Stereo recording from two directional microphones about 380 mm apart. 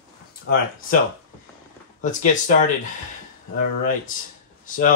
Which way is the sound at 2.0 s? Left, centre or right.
Centre.